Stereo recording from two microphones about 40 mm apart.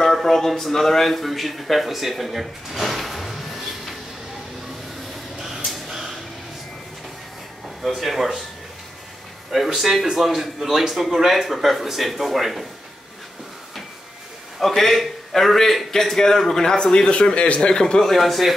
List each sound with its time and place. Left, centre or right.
0.0 s speech: centre
5.4 s a sound: centre
7.8 s speech: centre
9.8 s speech: centre
14.6 s a man's voice: centre
18.0 s speech: centre